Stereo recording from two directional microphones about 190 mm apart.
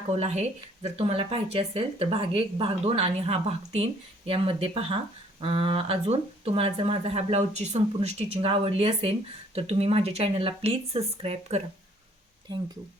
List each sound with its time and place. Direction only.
0.1 s speech: 35° right (ahead or behind)